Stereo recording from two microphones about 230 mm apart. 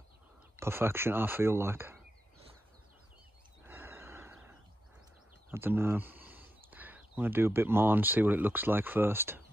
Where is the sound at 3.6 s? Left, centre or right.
Centre.